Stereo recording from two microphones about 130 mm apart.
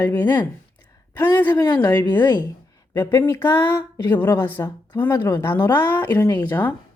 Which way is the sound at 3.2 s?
20° left (ahead or behind).